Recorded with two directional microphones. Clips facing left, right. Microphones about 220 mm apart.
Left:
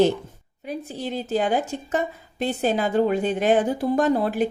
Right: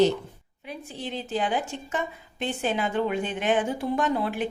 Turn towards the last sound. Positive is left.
turn(degrees=40)  # may be behind; listen again after turning